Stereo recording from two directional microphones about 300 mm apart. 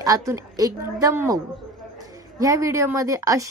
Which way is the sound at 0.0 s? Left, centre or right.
Centre.